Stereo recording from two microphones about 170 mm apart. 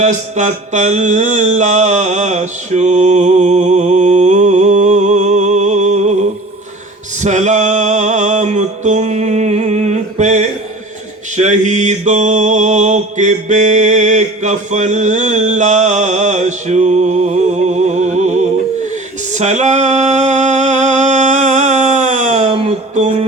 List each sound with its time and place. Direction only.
0.0 s mantra: 45° right (ahead or behind)
7.2 s music: 45° right (ahead or behind)
11.3 s mantra: 45° right (ahead or behind)
19.3 s music: 45° right (ahead or behind)